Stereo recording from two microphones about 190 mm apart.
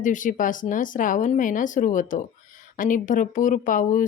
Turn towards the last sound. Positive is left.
turn(degrees=45)  # may be behind; listen again after turning